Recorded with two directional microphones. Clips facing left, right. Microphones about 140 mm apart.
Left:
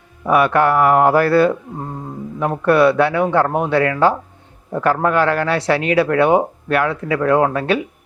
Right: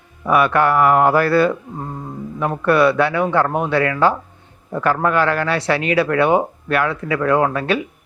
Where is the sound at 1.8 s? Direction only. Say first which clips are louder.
Left 1 dB; 20° left (ahead or behind).